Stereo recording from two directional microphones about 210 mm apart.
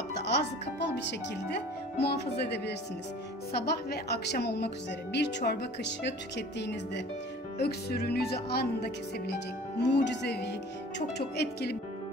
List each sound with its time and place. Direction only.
0.2 s a woman's voice: 55° left (ahead or behind)